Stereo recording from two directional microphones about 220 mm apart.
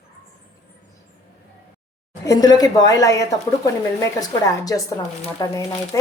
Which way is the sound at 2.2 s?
15° left (ahead or behind).